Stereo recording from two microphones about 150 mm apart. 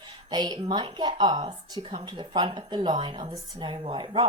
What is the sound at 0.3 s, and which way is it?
Speech, 30° right (ahead or behind).